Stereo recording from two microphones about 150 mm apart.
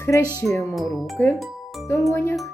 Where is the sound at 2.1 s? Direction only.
15° left (ahead or behind).